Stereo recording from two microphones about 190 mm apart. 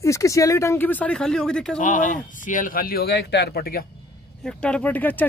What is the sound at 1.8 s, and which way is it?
Speech, 40° left (ahead or behind).